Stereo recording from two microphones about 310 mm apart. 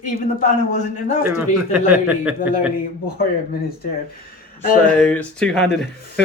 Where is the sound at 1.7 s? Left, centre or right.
Centre.